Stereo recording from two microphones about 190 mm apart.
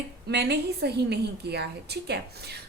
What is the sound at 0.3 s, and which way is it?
A woman's voice, 60° right (ahead or behind).